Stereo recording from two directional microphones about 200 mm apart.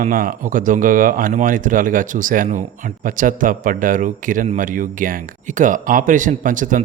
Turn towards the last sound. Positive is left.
turn(degrees=-40)  # may be behind; listen again after turning